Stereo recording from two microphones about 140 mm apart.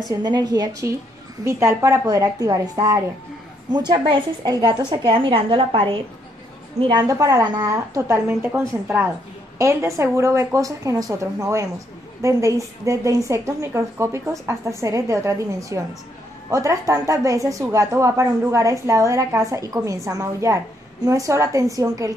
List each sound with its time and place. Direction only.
0.1 s a woman's voice: 30° right (ahead or behind)
6.9 s a woman's voice: 25° right (ahead or behind)